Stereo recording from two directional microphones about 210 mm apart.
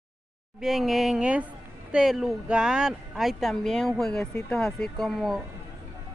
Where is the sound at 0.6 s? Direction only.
Centre (ahead or behind).